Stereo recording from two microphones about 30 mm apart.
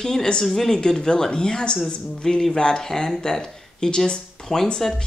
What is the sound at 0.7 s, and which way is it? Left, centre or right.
Speech, centre.